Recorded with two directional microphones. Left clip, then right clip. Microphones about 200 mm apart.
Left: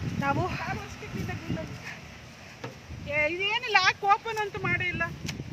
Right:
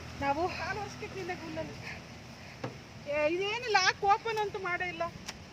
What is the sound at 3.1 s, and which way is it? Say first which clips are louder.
Speech: left 4 dB; 35° right (ahead or behind).